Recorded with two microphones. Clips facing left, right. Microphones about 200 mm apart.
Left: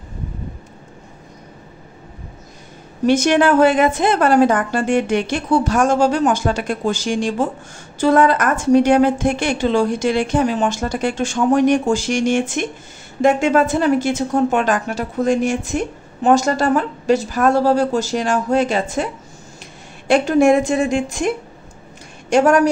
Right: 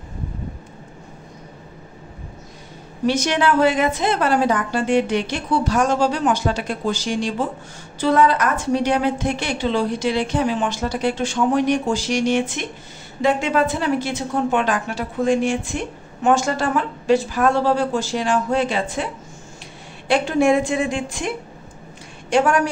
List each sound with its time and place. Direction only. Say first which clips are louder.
3.1 s a woman's voice: left 5 dB; 50° left (ahead or behind)
20.1 s a woman's voice: left 4 dB; 45° left (ahead or behind)
22.3 s speech: left 4 dB; 40° left (ahead or behind)